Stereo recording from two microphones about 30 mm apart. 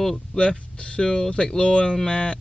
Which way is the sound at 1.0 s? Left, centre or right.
Left.